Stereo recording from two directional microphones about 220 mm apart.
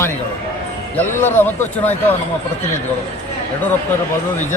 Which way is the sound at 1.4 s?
10° left (ahead or behind).